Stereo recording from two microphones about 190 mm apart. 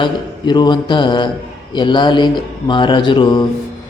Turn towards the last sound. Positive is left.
turn(degrees=25)  # may be behind; listen again after turning